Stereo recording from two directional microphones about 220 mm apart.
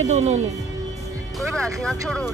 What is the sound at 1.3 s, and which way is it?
Speech, centre (ahead or behind).